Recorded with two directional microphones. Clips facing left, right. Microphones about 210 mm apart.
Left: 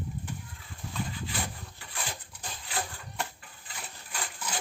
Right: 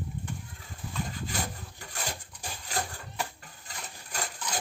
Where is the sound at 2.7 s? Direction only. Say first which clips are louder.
Right 2 dB; 40° right (ahead or behind).